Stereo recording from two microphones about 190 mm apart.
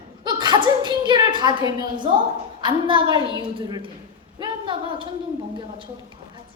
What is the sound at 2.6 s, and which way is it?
A woman's voice, 25° right (ahead or behind).